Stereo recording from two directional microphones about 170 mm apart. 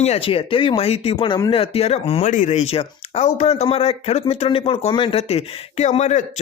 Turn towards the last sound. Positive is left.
turn(degrees=45)  # may be behind; listen again after turning